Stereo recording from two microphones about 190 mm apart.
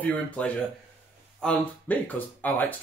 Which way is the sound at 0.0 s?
5° left (ahead or behind).